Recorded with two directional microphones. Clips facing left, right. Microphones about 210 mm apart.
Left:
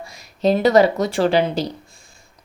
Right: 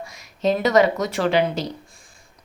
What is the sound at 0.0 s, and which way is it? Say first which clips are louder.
Speech: left 3 dB; 30° left (ahead or behind).